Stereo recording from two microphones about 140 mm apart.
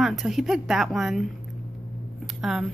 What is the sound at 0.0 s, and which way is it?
Speech, centre (ahead or behind).